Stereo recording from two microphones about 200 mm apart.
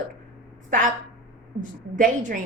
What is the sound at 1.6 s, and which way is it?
Speech, 40° right (ahead or behind).